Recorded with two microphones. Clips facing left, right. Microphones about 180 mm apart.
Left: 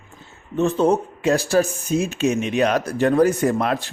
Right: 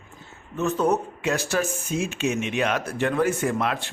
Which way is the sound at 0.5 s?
30° left (ahead or behind).